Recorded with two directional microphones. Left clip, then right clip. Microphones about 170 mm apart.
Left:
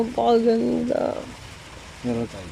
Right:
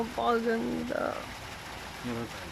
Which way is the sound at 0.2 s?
15° left (ahead or behind).